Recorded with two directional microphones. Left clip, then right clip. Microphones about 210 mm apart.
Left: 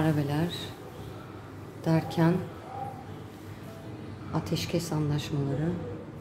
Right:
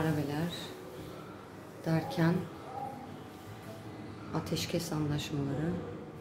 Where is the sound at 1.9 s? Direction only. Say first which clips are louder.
Left 5 dB; 20° left (ahead or behind).